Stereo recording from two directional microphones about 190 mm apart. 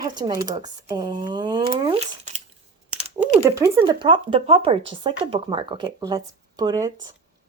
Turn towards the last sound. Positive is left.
turn(degrees=-20)  # may be behind; listen again after turning